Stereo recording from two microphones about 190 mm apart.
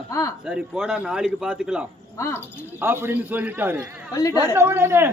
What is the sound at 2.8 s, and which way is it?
A man's voice, 10° right (ahead or behind).